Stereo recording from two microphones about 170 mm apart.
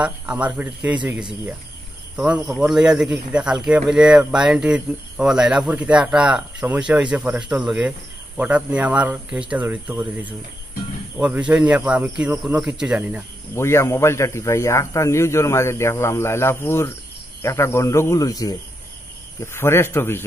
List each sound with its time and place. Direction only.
0.0 s speech: 5° right (ahead or behind)
13.6 s a man's voice: 15° left (ahead or behind)